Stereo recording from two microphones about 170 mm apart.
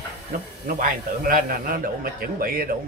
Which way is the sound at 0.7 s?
55° right (ahead or behind).